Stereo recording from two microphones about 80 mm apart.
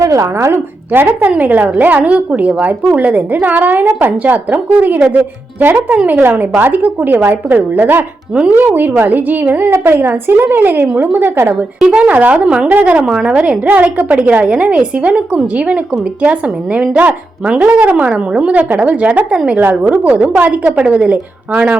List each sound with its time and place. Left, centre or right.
0.0 s a woman's voice: right; by 21.8 s centre